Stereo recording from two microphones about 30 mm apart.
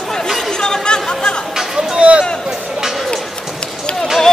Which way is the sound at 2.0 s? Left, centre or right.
Right.